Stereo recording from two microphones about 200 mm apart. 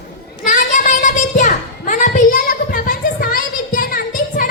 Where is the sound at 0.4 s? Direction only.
40° left (ahead or behind).